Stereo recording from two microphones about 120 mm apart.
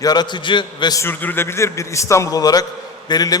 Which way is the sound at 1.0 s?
15° left (ahead or behind).